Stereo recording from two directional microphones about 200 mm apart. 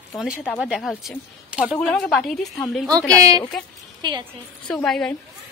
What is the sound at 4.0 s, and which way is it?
Speech, 20° right (ahead or behind).